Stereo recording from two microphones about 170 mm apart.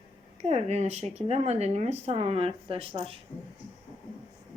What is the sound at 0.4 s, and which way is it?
Speech, 40° right (ahead or behind).